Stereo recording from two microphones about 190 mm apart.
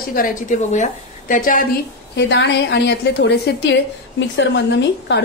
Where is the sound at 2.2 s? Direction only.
65° left (ahead or behind).